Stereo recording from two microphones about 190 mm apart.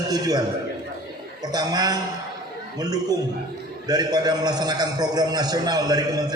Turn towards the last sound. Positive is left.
turn(degrees=-20)  # may be behind; listen again after turning